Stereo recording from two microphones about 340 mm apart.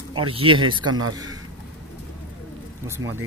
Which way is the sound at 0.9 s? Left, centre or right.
Right.